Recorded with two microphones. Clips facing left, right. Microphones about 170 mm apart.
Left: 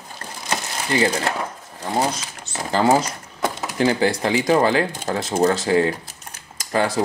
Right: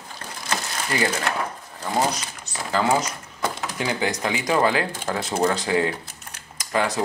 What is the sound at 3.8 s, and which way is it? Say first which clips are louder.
Speech: left 7 dB; 35° left (ahead or behind).